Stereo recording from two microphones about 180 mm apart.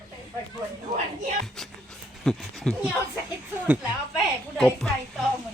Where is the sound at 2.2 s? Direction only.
Centre (ahead or behind).